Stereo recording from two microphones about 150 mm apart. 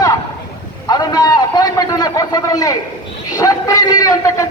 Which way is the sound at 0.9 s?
25° left (ahead or behind).